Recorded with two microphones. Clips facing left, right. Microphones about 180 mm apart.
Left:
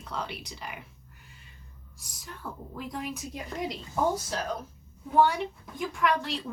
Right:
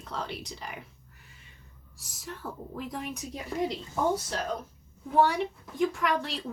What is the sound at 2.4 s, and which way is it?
Speech, 20° right (ahead or behind).